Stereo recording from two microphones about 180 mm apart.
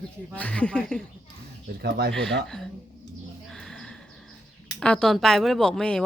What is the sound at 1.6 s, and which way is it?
Speech, 60° right (ahead or behind).